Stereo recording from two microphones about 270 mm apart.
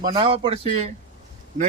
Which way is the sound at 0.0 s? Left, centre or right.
Centre.